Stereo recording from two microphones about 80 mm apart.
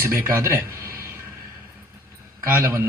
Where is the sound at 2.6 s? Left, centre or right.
Right.